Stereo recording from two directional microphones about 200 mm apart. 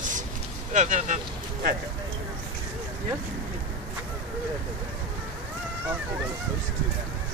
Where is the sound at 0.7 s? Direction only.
35° right (ahead or behind).